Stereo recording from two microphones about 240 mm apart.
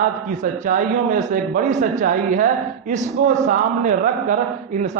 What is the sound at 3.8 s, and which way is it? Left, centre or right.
Speech, right.